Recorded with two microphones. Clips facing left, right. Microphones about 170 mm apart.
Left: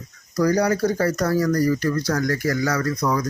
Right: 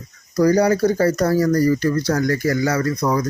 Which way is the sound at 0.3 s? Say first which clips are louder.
Right 4 dB; 30° right (ahead or behind).